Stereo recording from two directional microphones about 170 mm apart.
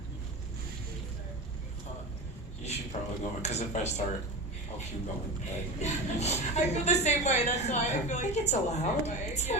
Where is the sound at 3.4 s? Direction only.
40° left (ahead or behind).